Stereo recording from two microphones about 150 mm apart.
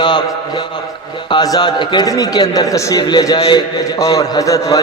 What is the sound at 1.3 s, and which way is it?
A man's voice, 25° left (ahead or behind).